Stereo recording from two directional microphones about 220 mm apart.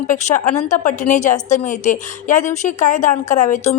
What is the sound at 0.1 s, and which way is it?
A woman's voice, 35° left (ahead or behind).